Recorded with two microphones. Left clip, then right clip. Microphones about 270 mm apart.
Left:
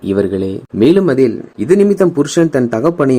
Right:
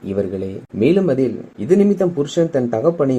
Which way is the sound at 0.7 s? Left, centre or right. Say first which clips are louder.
Left 5 dB; left.